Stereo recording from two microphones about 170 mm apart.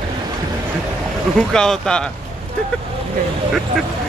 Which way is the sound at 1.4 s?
5° left (ahead or behind).